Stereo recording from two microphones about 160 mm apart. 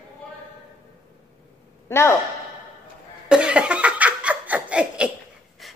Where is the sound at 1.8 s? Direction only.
15° left (ahead or behind).